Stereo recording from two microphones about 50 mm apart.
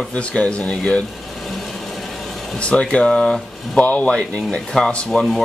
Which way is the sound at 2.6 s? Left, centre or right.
Left.